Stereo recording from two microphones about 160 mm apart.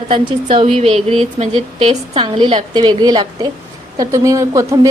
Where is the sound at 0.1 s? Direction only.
35° right (ahead or behind).